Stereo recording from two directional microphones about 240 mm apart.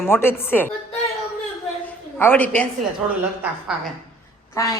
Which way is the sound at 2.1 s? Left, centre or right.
Centre.